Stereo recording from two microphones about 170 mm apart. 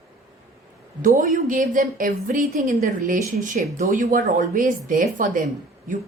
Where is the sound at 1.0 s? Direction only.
50° right (ahead or behind).